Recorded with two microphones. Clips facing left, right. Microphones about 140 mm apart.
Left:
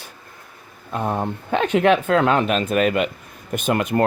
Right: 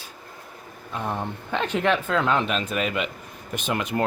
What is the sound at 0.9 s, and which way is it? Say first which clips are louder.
Speech: left 6 dB; 45° left (ahead or behind).